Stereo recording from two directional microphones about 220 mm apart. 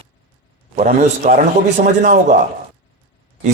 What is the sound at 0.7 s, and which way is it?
A man's voice, 35° right (ahead or behind).